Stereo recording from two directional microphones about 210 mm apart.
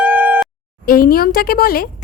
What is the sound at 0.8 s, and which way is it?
Speech, 45° left (ahead or behind).